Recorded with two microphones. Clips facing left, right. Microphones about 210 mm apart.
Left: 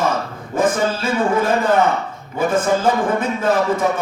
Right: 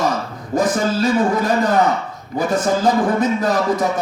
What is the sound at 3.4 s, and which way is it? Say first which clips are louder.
Speech: even; 35° right (ahead or behind).